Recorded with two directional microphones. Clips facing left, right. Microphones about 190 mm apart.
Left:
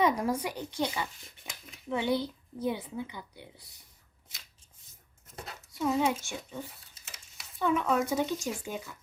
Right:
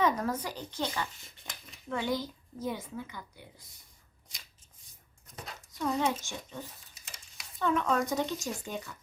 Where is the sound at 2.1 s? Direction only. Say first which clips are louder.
Left 4 dB; 65° left (ahead or behind).